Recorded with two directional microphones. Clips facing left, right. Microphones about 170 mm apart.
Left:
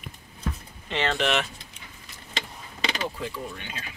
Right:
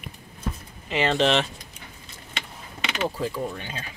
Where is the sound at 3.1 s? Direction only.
35° right (ahead or behind).